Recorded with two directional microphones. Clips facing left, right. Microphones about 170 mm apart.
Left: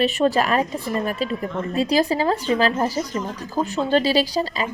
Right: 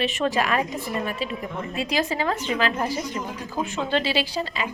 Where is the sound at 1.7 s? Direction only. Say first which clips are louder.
Left 6 dB; 35° left (ahead or behind).